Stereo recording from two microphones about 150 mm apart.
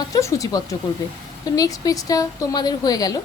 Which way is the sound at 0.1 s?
20° left (ahead or behind).